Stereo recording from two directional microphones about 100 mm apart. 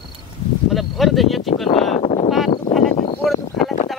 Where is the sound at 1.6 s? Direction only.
90° left.